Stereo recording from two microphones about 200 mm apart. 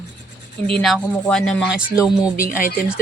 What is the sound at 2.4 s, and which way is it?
Speech, 40° left (ahead or behind).